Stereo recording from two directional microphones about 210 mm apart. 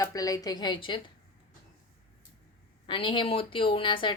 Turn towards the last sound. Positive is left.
turn(degrees=25)  # may be behind; listen again after turning